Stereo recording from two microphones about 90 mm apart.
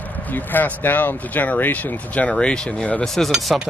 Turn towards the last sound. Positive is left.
turn(degrees=0)  # may be behind; listen again after turning